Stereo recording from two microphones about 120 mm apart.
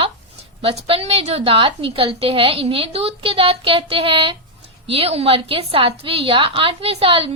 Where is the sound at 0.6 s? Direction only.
55° right (ahead or behind).